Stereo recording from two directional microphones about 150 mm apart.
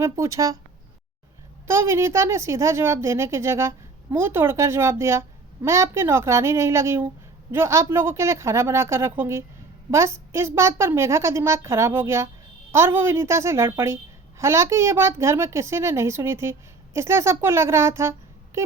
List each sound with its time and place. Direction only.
0.0 s a woman's voice: 20° right (ahead or behind)
1.6 s a woman's voice: 15° right (ahead or behind)